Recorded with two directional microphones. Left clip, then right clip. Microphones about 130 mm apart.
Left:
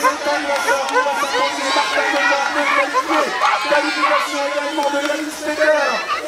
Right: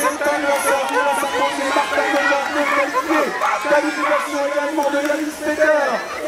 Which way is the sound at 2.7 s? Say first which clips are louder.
Left 1 dB; 25° left (ahead or behind).